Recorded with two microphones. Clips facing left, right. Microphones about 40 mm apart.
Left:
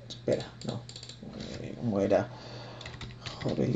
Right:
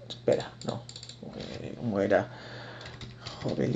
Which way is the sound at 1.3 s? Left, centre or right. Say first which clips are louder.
Right 1 dB; centre.